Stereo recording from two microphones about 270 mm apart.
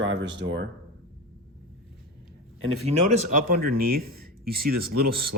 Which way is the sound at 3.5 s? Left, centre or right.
Right.